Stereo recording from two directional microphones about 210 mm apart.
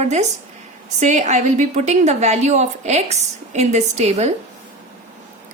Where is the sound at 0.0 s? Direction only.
35° right (ahead or behind).